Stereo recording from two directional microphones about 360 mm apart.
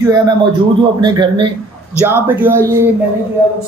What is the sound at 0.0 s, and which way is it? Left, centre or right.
Speech, centre.